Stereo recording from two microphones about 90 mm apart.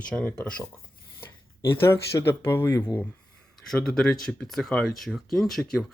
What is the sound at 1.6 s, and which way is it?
Speech, 30° left (ahead or behind).